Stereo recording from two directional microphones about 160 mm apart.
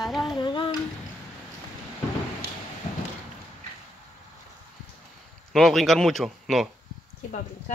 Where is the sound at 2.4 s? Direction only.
75° right (ahead or behind).